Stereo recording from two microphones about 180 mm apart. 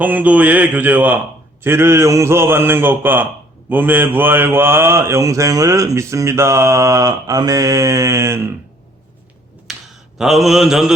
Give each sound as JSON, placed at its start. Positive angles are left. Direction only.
{"t": 0.0, "sound": "speech", "side_deg": -10}
{"t": 9.7, "sound": "a sound", "side_deg": 0}
{"t": 10.2, "sound": "mantra", "side_deg": 0}